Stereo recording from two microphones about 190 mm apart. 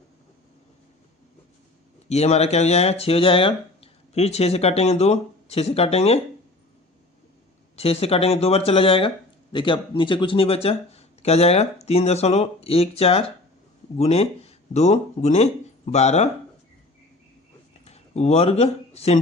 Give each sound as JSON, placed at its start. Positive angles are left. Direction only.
{"t": 2.0, "sound": "speech", "side_deg": 35}
{"t": 7.8, "sound": "speech", "side_deg": 30}
{"t": 17.8, "sound": "speech", "side_deg": 35}